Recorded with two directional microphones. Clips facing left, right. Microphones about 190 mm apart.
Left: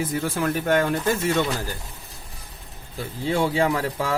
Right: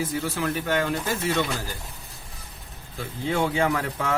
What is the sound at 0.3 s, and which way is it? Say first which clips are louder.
Speech: left 5 dB; 50° left (ahead or behind).